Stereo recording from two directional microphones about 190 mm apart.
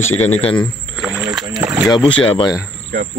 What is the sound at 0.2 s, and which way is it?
Speech, 35° left (ahead or behind).